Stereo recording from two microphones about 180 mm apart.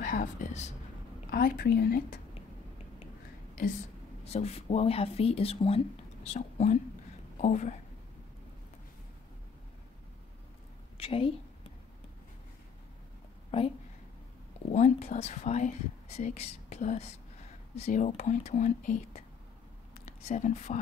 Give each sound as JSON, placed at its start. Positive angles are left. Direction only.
{"t": 0.0, "sound": "speech", "side_deg": 45}
{"t": 1.3, "sound": "a woman's voice", "side_deg": 55}
{"t": 4.2, "sound": "a woman's voice", "side_deg": 35}
{"t": 11.0, "sound": "a woman's voice", "side_deg": 30}
{"t": 13.5, "sound": "speech", "side_deg": 35}